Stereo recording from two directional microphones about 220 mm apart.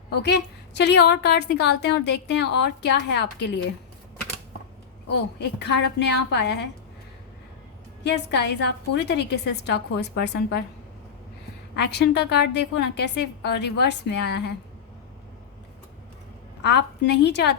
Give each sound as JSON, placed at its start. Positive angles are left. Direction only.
{"t": 0.1, "sound": "a woman's voice", "side_deg": 50}
{"t": 5.0, "sound": "a woman's voice", "side_deg": 50}
{"t": 8.0, "sound": "a woman's voice", "side_deg": 50}
{"t": 11.8, "sound": "a woman's voice", "side_deg": 50}
{"t": 16.6, "sound": "a woman's voice", "side_deg": 50}